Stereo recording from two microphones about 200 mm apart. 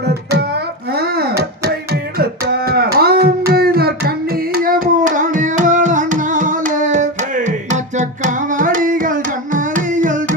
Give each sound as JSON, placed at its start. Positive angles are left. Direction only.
{"t": 0.0, "sound": "music", "side_deg": -55}